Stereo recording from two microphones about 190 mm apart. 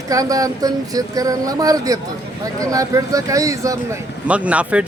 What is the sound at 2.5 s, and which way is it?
Speech, 20° right (ahead or behind).